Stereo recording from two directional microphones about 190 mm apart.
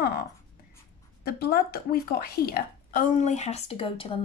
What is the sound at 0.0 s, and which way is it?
A woman's voice, 55° left (ahead or behind).